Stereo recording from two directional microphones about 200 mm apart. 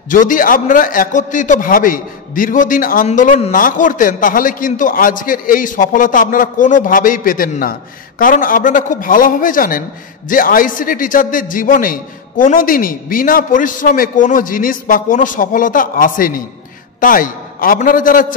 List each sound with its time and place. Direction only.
0.1 s a man's voice: 40° left (ahead or behind)